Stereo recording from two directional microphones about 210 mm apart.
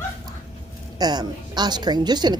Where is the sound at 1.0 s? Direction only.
20° right (ahead or behind).